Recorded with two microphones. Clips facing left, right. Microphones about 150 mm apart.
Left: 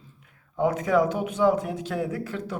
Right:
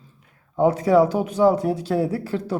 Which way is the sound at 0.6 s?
35° right (ahead or behind).